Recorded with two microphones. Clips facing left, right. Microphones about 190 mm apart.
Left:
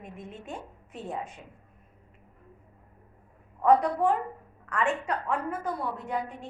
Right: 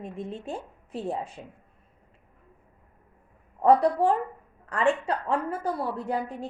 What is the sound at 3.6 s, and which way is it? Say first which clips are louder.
A woman's voice: right 2 dB; 35° right (ahead or behind).